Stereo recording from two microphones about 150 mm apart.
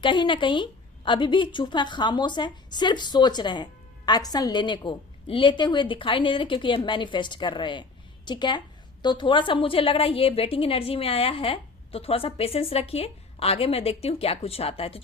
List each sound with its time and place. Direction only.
0.0 s a woman's voice: 35° left (ahead or behind)